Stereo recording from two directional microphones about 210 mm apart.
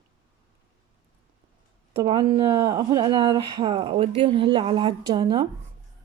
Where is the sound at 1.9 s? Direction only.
25° right (ahead or behind).